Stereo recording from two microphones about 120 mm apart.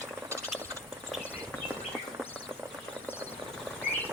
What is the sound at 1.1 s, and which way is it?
Clip-clop, centre (ahead or behind).